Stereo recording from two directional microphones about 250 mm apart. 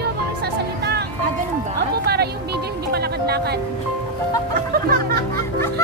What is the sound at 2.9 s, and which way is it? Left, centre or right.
Music, right.